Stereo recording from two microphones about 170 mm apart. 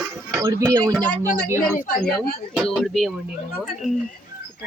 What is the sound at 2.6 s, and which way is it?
Speech, centre (ahead or behind).